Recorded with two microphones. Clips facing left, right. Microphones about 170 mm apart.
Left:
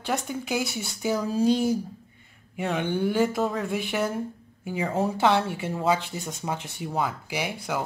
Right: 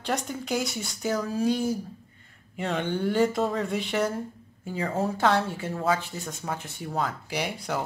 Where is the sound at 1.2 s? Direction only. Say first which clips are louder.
Left 5 dB; 25° left (ahead or behind).